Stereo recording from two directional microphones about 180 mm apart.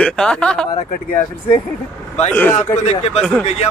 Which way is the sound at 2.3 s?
10° left (ahead or behind).